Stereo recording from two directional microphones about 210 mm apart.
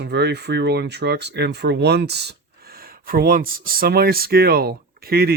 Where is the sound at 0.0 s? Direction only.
50° right (ahead or behind).